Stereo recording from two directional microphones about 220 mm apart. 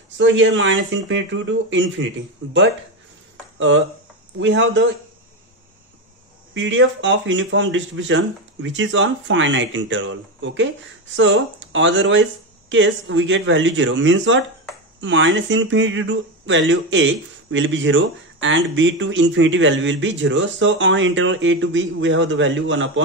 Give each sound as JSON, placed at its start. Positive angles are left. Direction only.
{"t": 0.2, "sound": "speech", "side_deg": -60}
{"t": 3.5, "sound": "speech", "side_deg": -60}
{"t": 6.5, "sound": "speech", "side_deg": -60}